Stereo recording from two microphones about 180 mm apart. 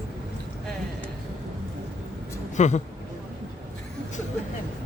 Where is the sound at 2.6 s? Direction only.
40° left (ahead or behind).